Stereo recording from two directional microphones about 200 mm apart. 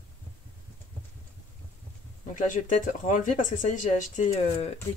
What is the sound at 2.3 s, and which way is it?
Speech, 40° left (ahead or behind).